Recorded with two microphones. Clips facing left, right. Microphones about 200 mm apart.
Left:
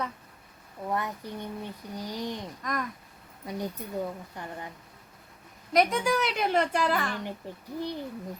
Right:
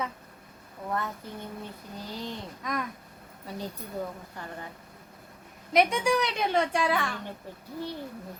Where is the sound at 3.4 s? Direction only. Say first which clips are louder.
Left 3 dB; 15° left (ahead or behind).